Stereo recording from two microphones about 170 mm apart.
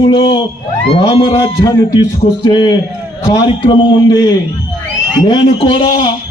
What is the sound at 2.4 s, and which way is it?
A man's voice, 25° left (ahead or behind).